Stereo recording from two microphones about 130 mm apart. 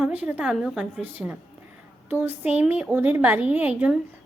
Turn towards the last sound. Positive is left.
turn(degrees=-10)  # may be behind; listen again after turning